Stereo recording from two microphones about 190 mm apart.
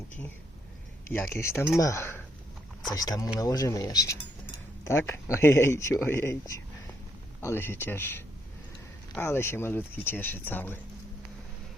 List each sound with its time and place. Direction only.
1.0 s speech: 15° left (ahead or behind)